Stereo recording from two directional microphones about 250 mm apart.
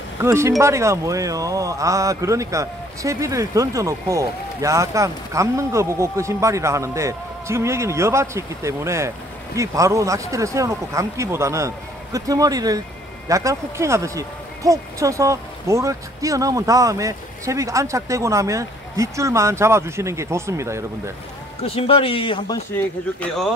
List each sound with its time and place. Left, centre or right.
0.2 s speech: centre
21.6 s speech: left